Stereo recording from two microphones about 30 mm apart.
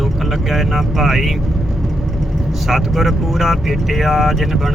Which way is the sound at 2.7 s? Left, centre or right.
Centre.